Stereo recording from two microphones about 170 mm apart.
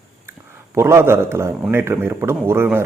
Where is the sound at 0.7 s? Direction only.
15° right (ahead or behind).